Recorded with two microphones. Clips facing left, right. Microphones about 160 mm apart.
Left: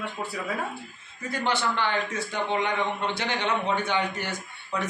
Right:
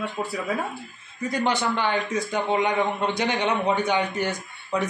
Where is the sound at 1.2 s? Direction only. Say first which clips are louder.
Right 3 dB; 15° right (ahead or behind).